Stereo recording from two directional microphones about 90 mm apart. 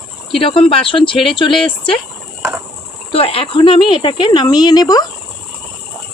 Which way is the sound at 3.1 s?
90° left.